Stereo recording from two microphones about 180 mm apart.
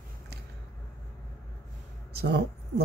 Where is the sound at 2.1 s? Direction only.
65° right (ahead or behind).